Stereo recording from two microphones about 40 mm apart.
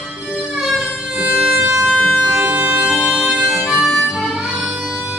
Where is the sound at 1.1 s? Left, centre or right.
Right.